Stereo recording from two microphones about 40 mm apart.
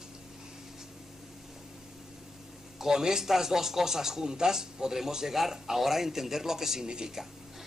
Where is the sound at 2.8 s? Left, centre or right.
Centre.